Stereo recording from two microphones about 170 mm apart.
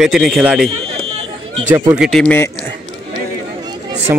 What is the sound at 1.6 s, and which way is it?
Speech, 10° right (ahead or behind).